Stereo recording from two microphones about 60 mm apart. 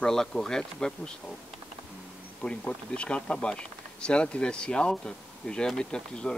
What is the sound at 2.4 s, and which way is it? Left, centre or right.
Speech, centre.